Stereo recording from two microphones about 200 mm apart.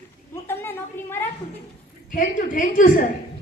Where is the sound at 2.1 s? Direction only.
40° left (ahead or behind).